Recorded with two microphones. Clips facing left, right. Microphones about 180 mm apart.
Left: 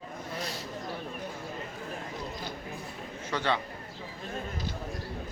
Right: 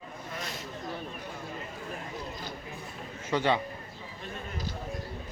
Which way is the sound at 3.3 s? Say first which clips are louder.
Right 3 dB; 15° right (ahead or behind).